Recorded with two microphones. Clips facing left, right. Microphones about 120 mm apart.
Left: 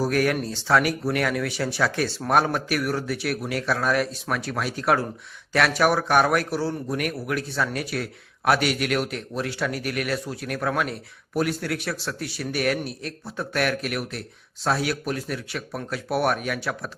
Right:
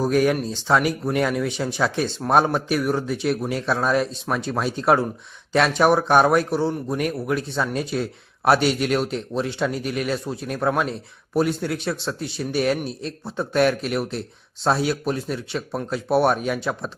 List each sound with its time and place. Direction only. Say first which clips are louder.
0.0 s a man's voice: right 3 dB; 20° right (ahead or behind)